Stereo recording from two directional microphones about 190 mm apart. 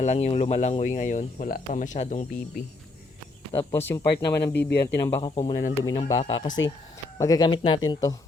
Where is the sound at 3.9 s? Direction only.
15° left (ahead or behind).